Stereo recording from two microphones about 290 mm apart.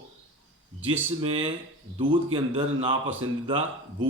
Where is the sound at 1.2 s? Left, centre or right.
Centre.